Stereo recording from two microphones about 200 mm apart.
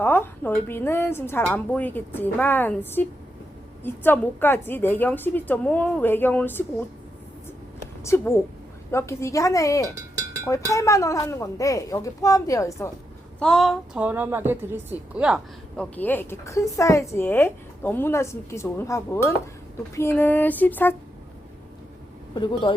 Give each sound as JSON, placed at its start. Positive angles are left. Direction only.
{"t": 0.0, "sound": "a woman's voice", "side_deg": 10}
{"t": 8.0, "sound": "a woman's voice", "side_deg": 10}
{"t": 13.4, "sound": "a woman's voice", "side_deg": 0}
{"t": 22.7, "sound": "speech", "side_deg": 25}